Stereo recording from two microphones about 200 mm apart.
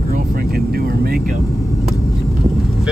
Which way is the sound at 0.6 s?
50° right (ahead or behind).